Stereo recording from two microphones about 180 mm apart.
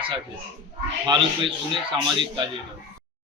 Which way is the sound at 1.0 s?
25° right (ahead or behind).